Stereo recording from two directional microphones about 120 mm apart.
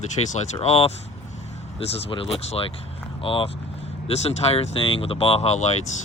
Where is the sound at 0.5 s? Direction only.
55° left (ahead or behind).